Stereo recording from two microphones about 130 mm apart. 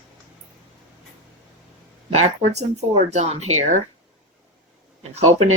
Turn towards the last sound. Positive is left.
turn(degrees=-55)  # may be behind; listen again after turning